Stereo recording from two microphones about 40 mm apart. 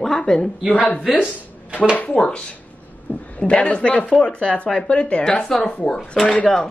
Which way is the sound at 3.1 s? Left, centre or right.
Left.